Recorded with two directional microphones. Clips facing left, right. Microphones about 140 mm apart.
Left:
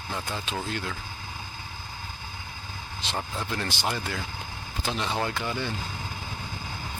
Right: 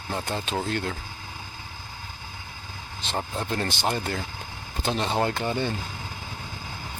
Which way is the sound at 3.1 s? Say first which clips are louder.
Right 4 dB; 40° right (ahead or behind).